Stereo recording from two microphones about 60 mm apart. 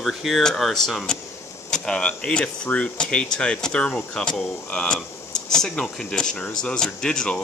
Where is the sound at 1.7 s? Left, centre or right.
Centre.